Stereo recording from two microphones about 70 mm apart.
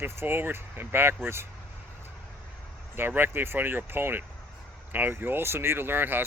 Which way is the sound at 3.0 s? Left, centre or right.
Right.